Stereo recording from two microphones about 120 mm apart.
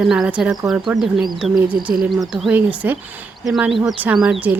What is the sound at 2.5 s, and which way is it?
Speech, 15° right (ahead or behind).